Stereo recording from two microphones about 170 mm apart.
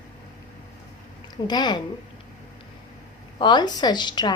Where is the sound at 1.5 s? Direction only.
25° left (ahead or behind).